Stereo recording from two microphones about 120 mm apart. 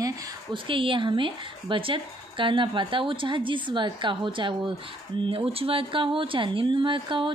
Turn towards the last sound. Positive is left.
turn(degrees=-45)  # may be behind; listen again after turning